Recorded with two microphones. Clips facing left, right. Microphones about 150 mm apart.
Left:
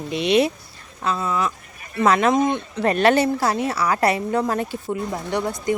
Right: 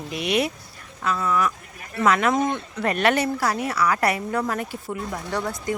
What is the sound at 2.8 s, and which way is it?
A woman's voice, 30° left (ahead or behind).